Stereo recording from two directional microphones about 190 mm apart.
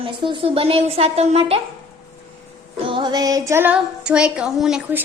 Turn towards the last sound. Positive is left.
turn(degrees=-5)  # may be behind; listen again after turning